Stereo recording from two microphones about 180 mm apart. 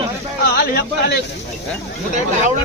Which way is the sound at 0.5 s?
60° left (ahead or behind).